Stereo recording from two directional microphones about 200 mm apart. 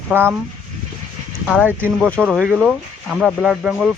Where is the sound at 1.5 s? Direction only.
5° right (ahead or behind).